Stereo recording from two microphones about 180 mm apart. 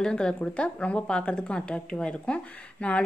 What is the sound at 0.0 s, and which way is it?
A woman's voice, 5° left (ahead or behind).